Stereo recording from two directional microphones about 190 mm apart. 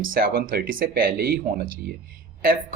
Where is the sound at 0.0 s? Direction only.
50° right (ahead or behind).